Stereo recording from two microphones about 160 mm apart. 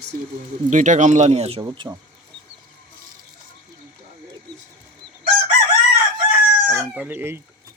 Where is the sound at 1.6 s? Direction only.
25° right (ahead or behind).